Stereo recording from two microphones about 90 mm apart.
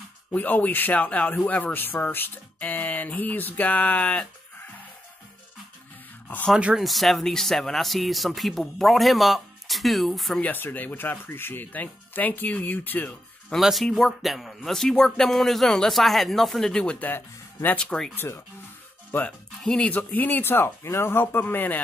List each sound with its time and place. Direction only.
0.3 s speech: 20° left (ahead or behind)
6.5 s speech: 5° right (ahead or behind)
10.4 s speech: 20° left (ahead or behind)
13.6 s speech: 5° right (ahead or behind)
17.1 s speech: 25° left (ahead or behind)
17.7 s speech: 5° left (ahead or behind)
18.1 s speech: 30° left (ahead or behind)
19.6 s speech: 10° left (ahead or behind)